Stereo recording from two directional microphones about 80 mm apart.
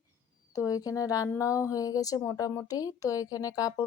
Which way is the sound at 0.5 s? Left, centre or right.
Left.